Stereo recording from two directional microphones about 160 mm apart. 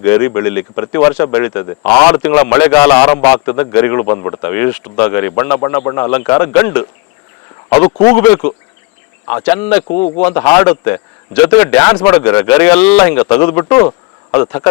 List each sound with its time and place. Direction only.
0.0 s speech: 15° left (ahead or behind)
4.4 s speech: 15° left (ahead or behind)